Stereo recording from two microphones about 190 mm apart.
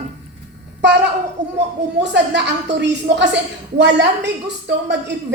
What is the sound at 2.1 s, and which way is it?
Speech, 65° right (ahead or behind).